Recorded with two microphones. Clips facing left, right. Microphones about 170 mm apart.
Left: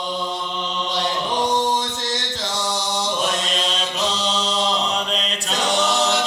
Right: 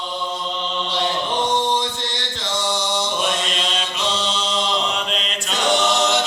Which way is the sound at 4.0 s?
40° left (ahead or behind).